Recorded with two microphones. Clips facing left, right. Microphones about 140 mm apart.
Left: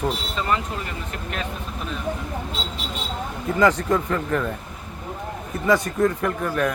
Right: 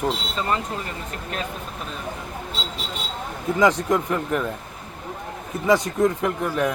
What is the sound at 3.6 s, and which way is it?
Speech, 15° right (ahead or behind).